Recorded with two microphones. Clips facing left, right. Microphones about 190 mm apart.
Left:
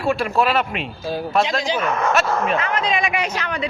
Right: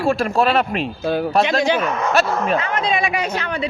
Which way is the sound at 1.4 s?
60° right (ahead or behind).